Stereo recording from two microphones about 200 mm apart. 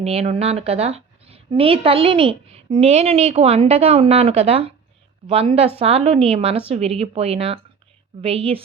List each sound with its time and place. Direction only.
0.0 s a woman's voice: 30° right (ahead or behind)